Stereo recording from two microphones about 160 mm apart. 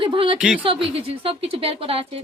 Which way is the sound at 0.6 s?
35° right (ahead or behind).